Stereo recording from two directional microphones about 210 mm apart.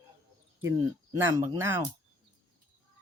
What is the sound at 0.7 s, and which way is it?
Speech, 15° right (ahead or behind).